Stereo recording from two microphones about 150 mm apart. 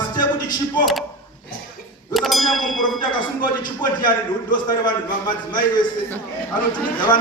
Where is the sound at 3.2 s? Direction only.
30° left (ahead or behind).